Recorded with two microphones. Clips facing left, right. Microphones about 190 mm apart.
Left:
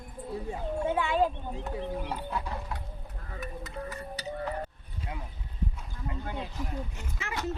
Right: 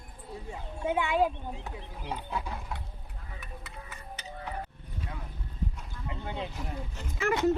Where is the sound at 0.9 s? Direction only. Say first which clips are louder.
Right 2 dB; 15° right (ahead or behind).